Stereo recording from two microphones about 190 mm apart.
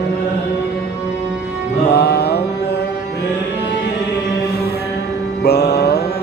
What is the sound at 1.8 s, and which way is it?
Music, 60° left (ahead or behind).